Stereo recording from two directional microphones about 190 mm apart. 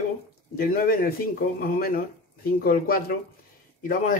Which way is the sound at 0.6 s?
50° left (ahead or behind).